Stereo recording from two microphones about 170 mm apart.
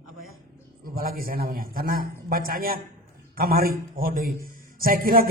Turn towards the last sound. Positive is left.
turn(degrees=-55)  # may be behind; listen again after turning